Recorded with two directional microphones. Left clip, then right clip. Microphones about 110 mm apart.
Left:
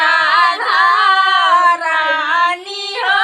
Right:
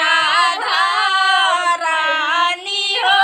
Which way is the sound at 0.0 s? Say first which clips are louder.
Left 3 dB; 25° right (ahead or behind).